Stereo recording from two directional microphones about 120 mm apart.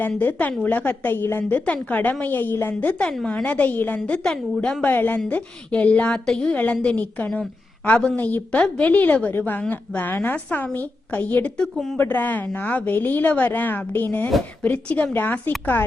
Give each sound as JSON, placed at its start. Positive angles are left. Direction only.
{"t": 0.2, "sound": "a woman's voice", "side_deg": 15}
{"t": 11.9, "sound": "a woman's voice", "side_deg": 15}